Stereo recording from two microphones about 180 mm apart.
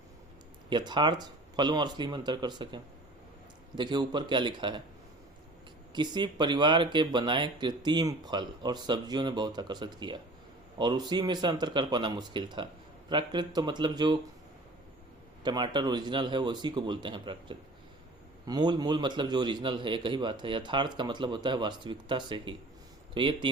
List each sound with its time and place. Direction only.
0.7 s speech: 25° right (ahead or behind)
5.9 s speech: 25° right (ahead or behind)
15.4 s speech: 25° right (ahead or behind)